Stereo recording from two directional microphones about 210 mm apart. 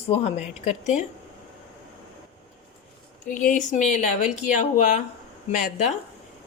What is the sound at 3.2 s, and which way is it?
Speech, 40° left (ahead or behind).